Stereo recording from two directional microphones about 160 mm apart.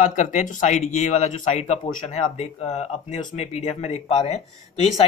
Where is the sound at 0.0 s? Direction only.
50° left (ahead or behind).